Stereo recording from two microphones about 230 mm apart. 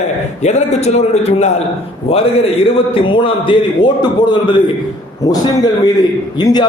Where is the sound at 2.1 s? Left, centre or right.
Left.